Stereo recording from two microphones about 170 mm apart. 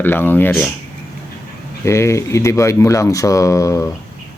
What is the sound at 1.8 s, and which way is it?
Speech, 15° left (ahead or behind).